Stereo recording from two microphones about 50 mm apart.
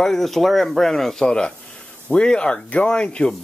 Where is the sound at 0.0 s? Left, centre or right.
Centre.